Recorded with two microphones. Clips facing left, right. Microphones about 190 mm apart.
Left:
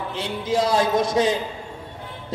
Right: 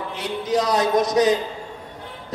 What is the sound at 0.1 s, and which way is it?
A man's voice, 25° left (ahead or behind).